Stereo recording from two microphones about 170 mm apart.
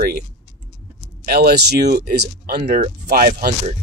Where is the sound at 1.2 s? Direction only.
65° right (ahead or behind).